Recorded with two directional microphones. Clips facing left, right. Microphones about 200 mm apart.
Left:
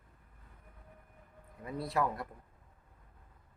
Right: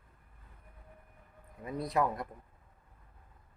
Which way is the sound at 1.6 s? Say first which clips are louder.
Right 2 dB; 20° right (ahead or behind).